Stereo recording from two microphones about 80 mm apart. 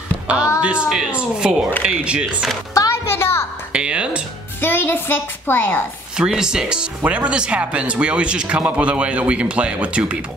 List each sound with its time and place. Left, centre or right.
0.6 s speech: centre
2.7 s music: left
3.7 s speech: centre
4.6 s a woman's voice: left
6.1 s speech: centre